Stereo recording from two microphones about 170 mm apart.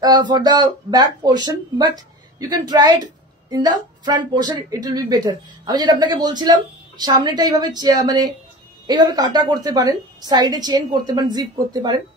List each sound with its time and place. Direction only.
0.0 s a woman's voice: 25° right (ahead or behind)